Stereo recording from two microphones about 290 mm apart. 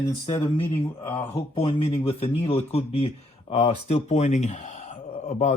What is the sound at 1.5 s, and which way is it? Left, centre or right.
Speech, centre.